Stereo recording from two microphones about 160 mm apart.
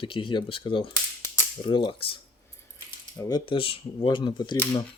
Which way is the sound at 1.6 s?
30° left (ahead or behind).